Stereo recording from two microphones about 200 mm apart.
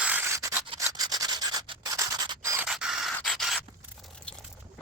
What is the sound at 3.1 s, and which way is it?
Rub, centre (ahead or behind).